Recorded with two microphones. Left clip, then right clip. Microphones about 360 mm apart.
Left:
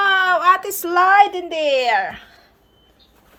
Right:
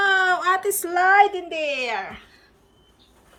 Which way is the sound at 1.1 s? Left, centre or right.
Left.